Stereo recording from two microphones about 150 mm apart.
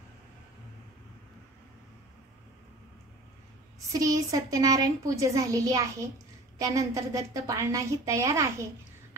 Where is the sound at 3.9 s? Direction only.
25° right (ahead or behind).